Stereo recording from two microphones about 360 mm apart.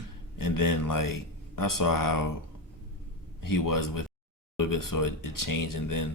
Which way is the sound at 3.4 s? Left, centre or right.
Left.